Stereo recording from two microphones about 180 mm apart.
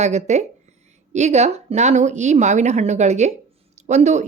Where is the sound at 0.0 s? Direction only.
40° right (ahead or behind).